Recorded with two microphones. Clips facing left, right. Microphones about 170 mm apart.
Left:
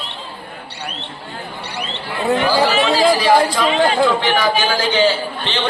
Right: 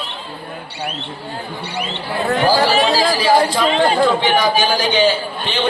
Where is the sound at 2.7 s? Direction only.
30° right (ahead or behind).